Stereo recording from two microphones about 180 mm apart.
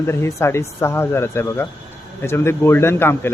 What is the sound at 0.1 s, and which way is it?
A man's voice, 15° left (ahead or behind).